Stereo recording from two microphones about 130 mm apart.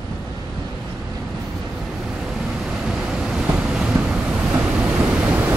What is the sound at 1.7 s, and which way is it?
Waves, centre (ahead or behind).